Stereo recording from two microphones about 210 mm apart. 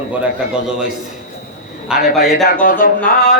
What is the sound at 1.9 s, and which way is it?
Speech, 5° right (ahead or behind).